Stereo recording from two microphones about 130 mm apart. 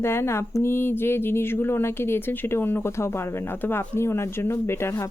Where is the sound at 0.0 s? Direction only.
20° left (ahead or behind).